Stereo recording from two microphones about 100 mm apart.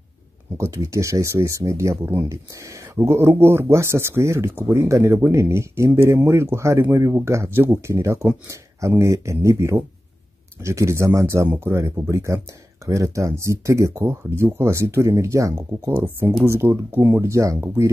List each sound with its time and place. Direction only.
0.6 s speech: 30° right (ahead or behind)